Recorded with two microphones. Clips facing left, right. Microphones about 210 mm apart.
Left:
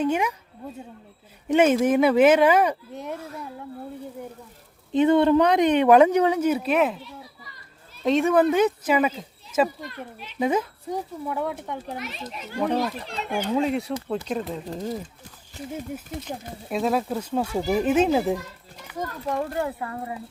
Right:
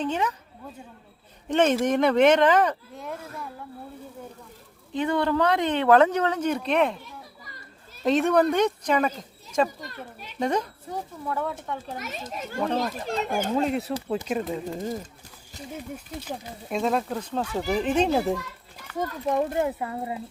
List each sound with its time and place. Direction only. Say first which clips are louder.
0.0 s speech: left 3 dB; 10° left (ahead or behind)
1.5 s speech: left 3 dB; 10° left (ahead or behind)
2.9 s speech: left 3 dB; 20° left (ahead or behind)
4.9 s speech: left 7 dB; 20° left (ahead or behind); by 7.0 s 5° left (ahead or behind)
8.0 s speech: left 1 dB; centre (ahead or behind)
11.3 s speech: left 1 dB; 15° left (ahead or behind)
11.9 s a child's voice: even; 45° right (ahead or behind)
13.6 s speech: left 1 dB; centre (ahead or behind)
16.2 s speech: left 1 dB; centre (ahead or behind)
18.9 s a child's voice: right 3 dB; 20° right (ahead or behind)